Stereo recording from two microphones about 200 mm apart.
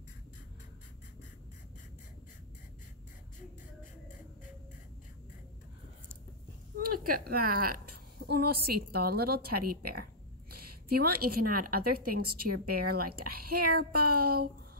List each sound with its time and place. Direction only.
6.8 s a woman's voice: 45° right (ahead or behind)